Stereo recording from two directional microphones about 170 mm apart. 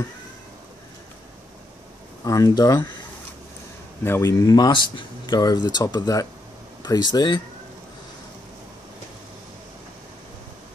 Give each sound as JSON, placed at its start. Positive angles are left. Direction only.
{"t": 2.2, "sound": "speech", "side_deg": 20}
{"t": 4.0, "sound": "speech", "side_deg": 15}